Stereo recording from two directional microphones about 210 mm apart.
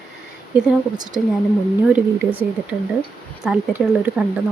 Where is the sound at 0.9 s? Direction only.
20° right (ahead or behind).